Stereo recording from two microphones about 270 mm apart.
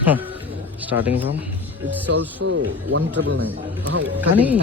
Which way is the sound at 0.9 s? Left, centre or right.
Centre.